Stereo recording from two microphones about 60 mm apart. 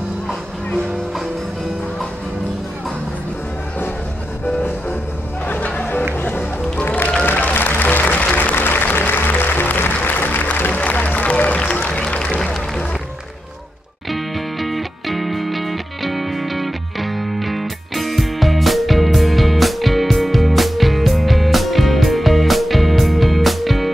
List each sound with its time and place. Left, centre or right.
5.5 s music: left
7.2 s applause: left
10.0 s music: left
14.1 s music: centre